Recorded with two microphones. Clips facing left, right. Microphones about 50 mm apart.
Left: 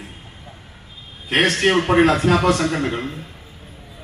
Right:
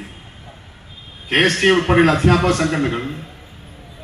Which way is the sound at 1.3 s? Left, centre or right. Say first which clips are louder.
Right 2 dB; centre.